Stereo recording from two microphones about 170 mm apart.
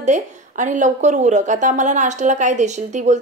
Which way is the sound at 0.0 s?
45° right (ahead or behind).